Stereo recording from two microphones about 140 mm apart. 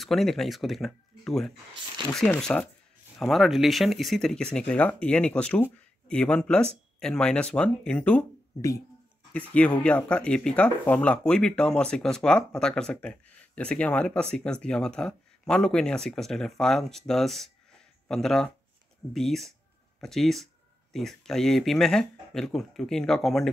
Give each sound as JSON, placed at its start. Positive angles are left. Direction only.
{"t": 0.0, "sound": "speech", "side_deg": 0}
{"t": 8.5, "sound": "speech", "side_deg": 20}
{"t": 9.3, "sound": "speech", "side_deg": 10}